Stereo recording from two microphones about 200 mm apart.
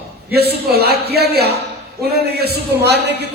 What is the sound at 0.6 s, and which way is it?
A man's voice, 50° right (ahead or behind).